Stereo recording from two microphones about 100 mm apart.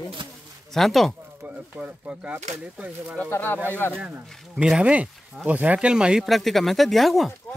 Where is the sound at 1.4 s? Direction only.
15° right (ahead or behind).